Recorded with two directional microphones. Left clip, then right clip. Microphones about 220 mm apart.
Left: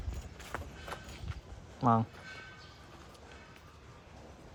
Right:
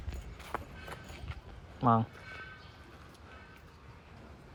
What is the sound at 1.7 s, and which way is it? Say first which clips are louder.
Speech: right 1 dB; 5° left (ahead or behind).